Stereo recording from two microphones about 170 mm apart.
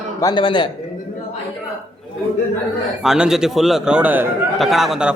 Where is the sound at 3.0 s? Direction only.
5° right (ahead or behind).